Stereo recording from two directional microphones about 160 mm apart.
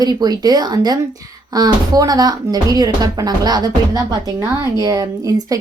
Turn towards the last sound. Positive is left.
turn(degrees=-20)  # may be behind; listen again after turning